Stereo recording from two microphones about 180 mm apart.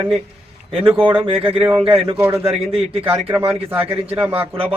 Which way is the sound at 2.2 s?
10° right (ahead or behind).